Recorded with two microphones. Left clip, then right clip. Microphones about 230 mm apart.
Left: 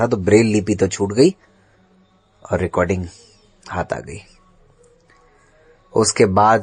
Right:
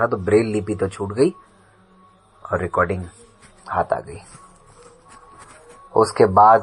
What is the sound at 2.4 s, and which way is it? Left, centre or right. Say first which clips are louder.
Speech: left 1 dB; left.